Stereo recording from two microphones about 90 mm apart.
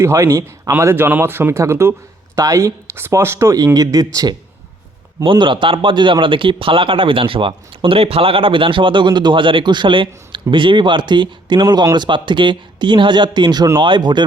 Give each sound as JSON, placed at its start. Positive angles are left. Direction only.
{"t": 0.0, "sound": "speech", "side_deg": -35}
{"t": 0.7, "sound": "a man's voice", "side_deg": -25}
{"t": 2.9, "sound": "speech", "side_deg": -30}
{"t": 5.2, "sound": "speech", "side_deg": -65}
{"t": 11.9, "sound": "speech", "side_deg": -65}